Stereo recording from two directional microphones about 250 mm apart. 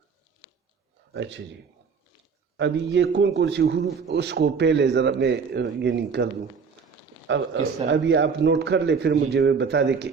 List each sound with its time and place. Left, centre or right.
1.1 s a man's voice: right
2.6 s a man's voice: right
7.3 s a man's voice: right